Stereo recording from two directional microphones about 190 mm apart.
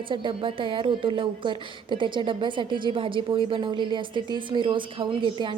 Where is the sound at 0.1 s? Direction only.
25° right (ahead or behind).